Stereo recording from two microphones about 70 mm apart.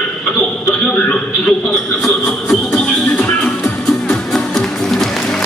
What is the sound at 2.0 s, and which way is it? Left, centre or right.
Music, centre.